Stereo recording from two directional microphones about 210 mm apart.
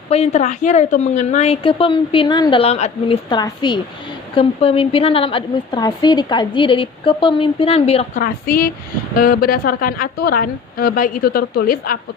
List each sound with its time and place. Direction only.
0.1 s a woman's voice: 30° left (ahead or behind)
8.2 s a woman's voice: 45° left (ahead or behind)